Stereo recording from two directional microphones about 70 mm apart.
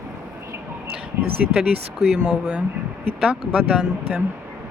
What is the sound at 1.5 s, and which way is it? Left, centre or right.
Speech, centre.